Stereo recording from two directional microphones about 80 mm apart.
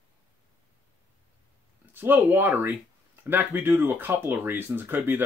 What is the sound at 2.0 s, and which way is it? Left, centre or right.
Speech, right.